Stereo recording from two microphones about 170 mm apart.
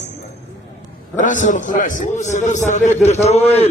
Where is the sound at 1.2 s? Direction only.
50° left (ahead or behind).